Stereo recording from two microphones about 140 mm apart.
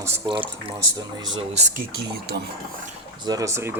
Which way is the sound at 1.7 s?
90° right.